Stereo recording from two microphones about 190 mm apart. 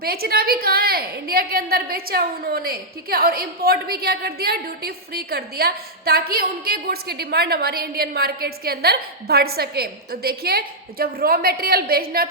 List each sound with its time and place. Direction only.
0.0 s a woman's voice: 55° right (ahead or behind)